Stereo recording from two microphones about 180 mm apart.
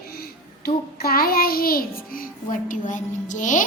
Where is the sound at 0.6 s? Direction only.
55° left (ahead or behind).